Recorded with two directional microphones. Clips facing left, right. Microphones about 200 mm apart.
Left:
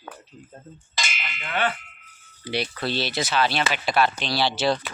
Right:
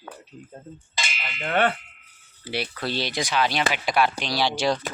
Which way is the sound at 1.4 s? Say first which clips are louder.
Right 4 dB; 50° right (ahead or behind).